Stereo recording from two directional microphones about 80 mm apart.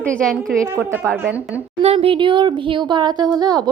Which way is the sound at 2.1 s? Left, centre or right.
Right.